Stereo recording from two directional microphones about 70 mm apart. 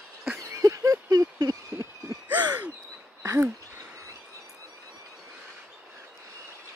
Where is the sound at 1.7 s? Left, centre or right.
Right.